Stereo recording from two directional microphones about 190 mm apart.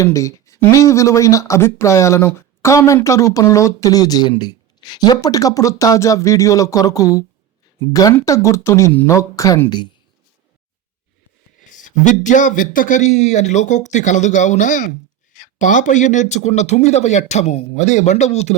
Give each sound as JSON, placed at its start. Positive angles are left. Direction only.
{"t": 0.0, "sound": "speech", "side_deg": 15}
{"t": 11.7, "sound": "a man's voice", "side_deg": 40}